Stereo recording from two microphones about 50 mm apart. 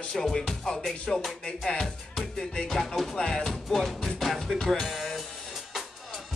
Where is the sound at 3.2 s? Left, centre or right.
Centre.